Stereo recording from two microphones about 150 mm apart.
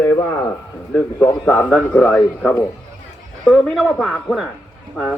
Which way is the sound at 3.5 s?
Centre (ahead or behind).